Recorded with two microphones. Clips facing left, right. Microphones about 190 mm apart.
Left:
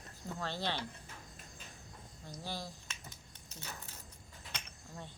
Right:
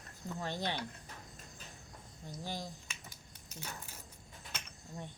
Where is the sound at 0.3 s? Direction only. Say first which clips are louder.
Right 1 dB; 15° right (ahead or behind).